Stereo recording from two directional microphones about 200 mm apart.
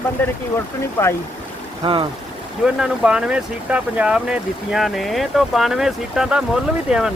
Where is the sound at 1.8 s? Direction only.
25° right (ahead or behind).